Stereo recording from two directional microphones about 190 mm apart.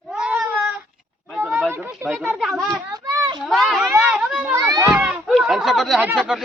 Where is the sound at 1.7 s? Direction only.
15° right (ahead or behind).